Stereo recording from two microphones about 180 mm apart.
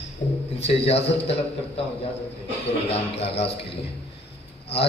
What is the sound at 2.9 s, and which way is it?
Speech, 35° left (ahead or behind).